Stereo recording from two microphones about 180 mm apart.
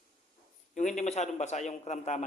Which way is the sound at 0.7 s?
40° left (ahead or behind).